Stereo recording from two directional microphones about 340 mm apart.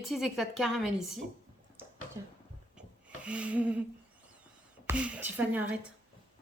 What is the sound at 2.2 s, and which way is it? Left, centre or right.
Speech, centre.